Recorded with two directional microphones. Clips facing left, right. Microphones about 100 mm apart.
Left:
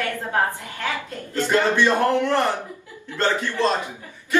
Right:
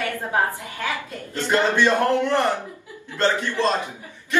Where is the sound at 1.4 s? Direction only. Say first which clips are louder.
Left 1 dB; 15° right (ahead or behind).